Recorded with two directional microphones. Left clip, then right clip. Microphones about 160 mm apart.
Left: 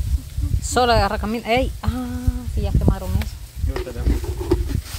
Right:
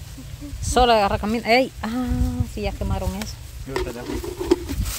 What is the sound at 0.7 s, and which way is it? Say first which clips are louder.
Speech: right 1 dB; centre (ahead or behind).